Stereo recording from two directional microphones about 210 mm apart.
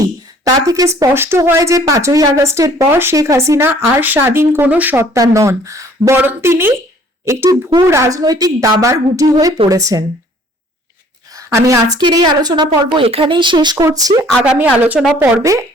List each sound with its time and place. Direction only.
0.0 s speech: 15° right (ahead or behind)
11.3 s a woman's voice: 15° right (ahead or behind)
14.8 s speech: 5° right (ahead or behind)